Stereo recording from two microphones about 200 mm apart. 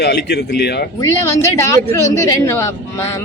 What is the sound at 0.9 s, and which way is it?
Speech, 15° left (ahead or behind).